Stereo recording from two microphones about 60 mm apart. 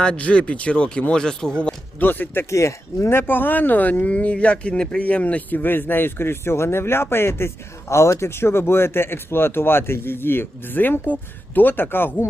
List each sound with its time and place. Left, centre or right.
0.0 s speech: centre
2.0 s speech: left
2.5 s speech: left
3.1 s speech: left